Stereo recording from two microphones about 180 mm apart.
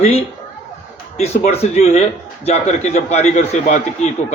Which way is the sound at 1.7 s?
40° left (ahead or behind).